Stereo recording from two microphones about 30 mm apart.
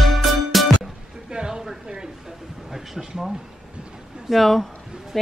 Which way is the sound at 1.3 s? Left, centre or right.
Right.